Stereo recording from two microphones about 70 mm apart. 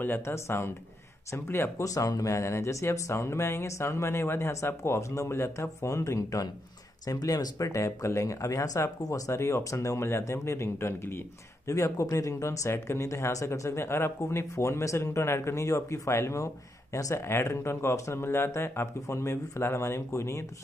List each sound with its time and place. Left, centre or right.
0.2 s speech: left
1.9 s speech: left
7.1 s speech: left
9.3 s speech: left
11.7 s speech: left